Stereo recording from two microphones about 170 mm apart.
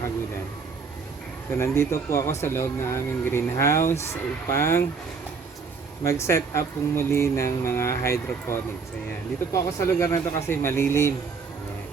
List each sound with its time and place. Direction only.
1.5 s speech: 15° left (ahead or behind)
6.0 s speech: 15° left (ahead or behind)